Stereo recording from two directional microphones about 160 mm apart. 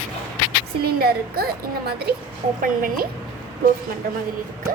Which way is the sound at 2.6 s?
60° right (ahead or behind).